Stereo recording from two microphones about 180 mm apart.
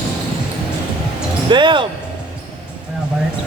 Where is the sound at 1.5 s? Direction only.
25° right (ahead or behind).